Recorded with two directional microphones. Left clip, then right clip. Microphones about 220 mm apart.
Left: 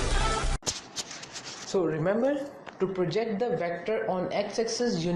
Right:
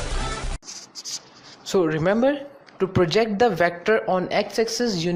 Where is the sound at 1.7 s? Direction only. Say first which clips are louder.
Right 6 dB; 40° right (ahead or behind).